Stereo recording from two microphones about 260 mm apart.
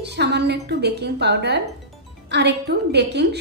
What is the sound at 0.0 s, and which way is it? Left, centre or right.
A woman's voice, right.